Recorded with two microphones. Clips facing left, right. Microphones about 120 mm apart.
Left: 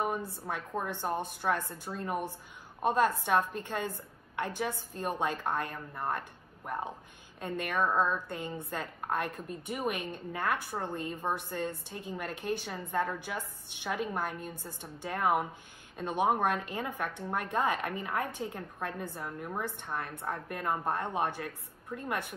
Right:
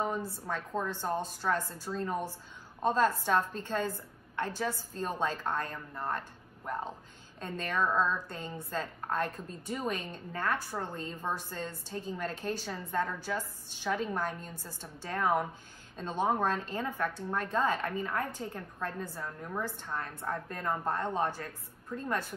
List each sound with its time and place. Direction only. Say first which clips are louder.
0.0 s speech: even; 15° left (ahead or behind)